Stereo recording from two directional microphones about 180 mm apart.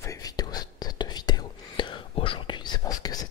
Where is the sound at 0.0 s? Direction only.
20° left (ahead or behind).